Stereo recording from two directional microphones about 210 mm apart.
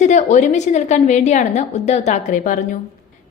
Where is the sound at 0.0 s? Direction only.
35° left (ahead or behind).